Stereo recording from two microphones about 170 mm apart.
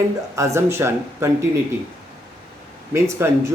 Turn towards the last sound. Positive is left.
turn(degrees=-15)  # may be behind; listen again after turning